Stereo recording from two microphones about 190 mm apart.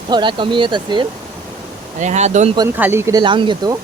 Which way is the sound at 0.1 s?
25° right (ahead or behind).